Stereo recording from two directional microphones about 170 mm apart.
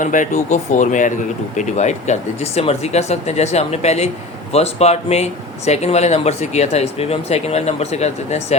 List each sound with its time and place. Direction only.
0.0 s speech: 50° left (ahead or behind)